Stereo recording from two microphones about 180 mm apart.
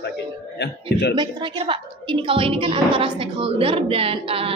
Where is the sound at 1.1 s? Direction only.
25° right (ahead or behind).